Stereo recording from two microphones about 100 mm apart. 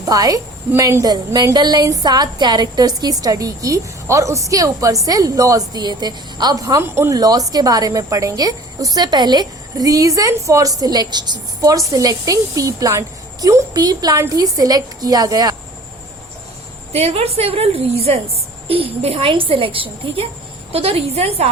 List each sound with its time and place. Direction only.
0.0 s a woman's voice: 35° right (ahead or behind)
1.0 s a woman's voice: 40° right (ahead or behind)
6.9 s speech: 25° right (ahead or behind)
7.2 s a woman's voice: 40° right (ahead or behind)
13.7 s a woman's voice: 40° right (ahead or behind)
16.9 s a woman's voice: 90° right; by 20.2 s 60° right (ahead or behind)
20.7 s a woman's voice: 85° right